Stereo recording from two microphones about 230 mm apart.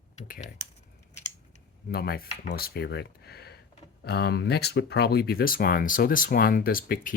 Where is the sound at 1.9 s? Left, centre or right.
Left.